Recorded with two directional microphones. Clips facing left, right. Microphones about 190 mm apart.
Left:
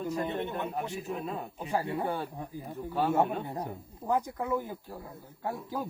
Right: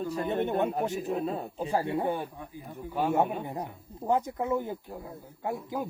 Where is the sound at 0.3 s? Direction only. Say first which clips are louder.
Right 6 dB; 45° right (ahead or behind).